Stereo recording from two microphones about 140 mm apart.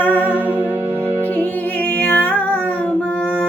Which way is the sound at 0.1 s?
15° right (ahead or behind).